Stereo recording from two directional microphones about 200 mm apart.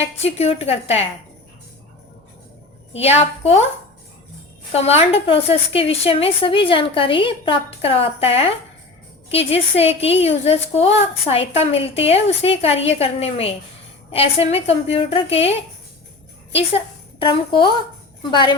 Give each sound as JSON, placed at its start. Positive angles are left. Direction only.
{"t": 0.3, "sound": "a woman's voice", "side_deg": 30}
{"t": 2.9, "sound": "a woman's voice", "side_deg": 30}
{"t": 4.7, "sound": "a woman's voice", "side_deg": 30}
{"t": 16.7, "sound": "a woman's voice", "side_deg": 25}